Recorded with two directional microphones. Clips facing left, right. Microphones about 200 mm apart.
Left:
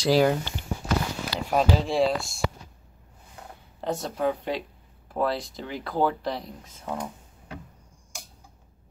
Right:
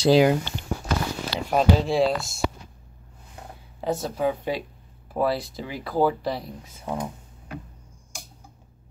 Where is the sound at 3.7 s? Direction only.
5° right (ahead or behind).